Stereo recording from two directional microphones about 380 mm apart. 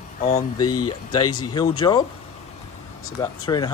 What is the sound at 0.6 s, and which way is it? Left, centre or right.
Speech, left.